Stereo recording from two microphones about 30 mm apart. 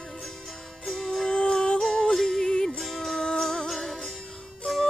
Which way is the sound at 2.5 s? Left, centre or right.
Left.